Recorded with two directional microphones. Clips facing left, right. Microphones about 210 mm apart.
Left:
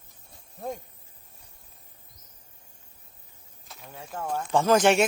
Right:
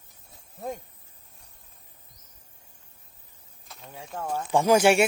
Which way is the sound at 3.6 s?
Centre (ahead or behind).